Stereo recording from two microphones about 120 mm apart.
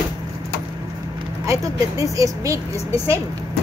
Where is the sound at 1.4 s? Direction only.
25° right (ahead or behind).